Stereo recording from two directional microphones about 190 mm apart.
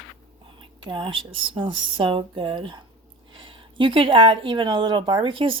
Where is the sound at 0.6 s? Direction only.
25° right (ahead or behind).